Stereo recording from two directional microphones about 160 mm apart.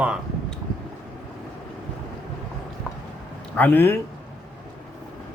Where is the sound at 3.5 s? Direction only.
10° left (ahead or behind).